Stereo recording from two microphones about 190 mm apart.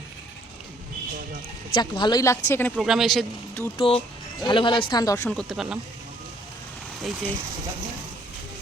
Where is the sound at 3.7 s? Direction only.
30° left (ahead or behind).